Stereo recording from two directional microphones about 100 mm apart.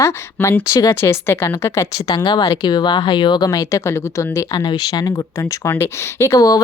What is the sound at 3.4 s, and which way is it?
Speech, 35° left (ahead or behind).